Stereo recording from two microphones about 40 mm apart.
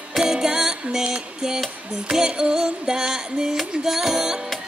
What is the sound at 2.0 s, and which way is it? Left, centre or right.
Music, centre.